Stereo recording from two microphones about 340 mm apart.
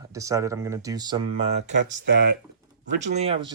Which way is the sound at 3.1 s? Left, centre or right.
Centre.